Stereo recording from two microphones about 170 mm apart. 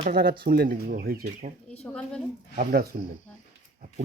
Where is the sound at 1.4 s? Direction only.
45° right (ahead or behind).